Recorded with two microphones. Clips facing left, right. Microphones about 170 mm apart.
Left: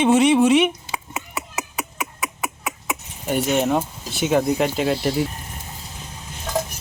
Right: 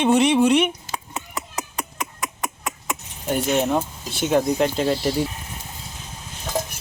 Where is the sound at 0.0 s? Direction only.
Centre (ahead or behind).